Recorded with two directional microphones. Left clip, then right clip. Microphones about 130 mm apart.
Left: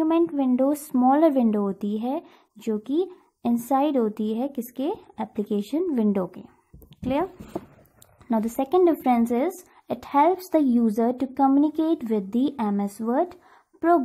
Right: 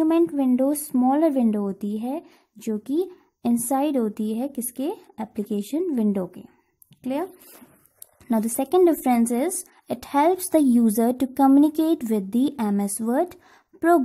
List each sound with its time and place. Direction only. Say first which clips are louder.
0.0 s a woman's voice: right 2 dB; 45° right (ahead or behind)
7.0 s speech: left 2 dB; 25° right (ahead or behind)
8.3 s speech: right 1 dB; 40° right (ahead or behind)